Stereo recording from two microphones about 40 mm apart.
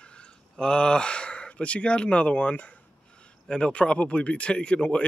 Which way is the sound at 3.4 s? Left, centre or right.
Left.